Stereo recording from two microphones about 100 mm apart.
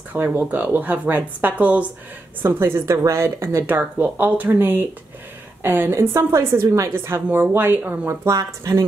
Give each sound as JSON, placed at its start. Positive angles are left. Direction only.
{"t": 0.1, "sound": "a woman's voice", "side_deg": -20}
{"t": 2.4, "sound": "a woman's voice", "side_deg": -25}
{"t": 8.3, "sound": "speech", "side_deg": -35}